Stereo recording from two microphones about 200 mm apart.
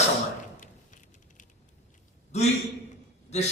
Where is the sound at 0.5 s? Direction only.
40° left (ahead or behind).